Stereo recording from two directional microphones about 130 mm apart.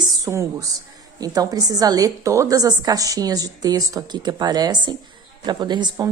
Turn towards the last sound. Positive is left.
turn(degrees=-35)  # may be behind; listen again after turning